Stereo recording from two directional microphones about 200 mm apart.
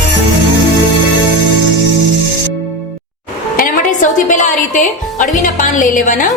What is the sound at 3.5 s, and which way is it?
Music, 40° left (ahead or behind).